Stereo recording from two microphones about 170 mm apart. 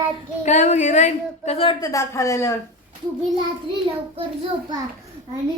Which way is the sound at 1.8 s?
20° left (ahead or behind).